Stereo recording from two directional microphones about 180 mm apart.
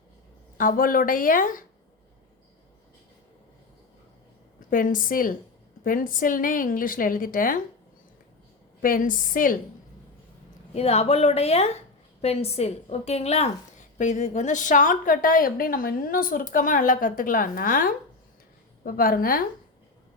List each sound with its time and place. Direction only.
0.5 s a woman's voice: 50° left (ahead or behind)
4.7 s a woman's voice: 50° left (ahead or behind)
8.8 s a woman's voice: 50° left (ahead or behind)
10.8 s a woman's voice: 35° left (ahead or behind); by 19.5 s 55° left (ahead or behind)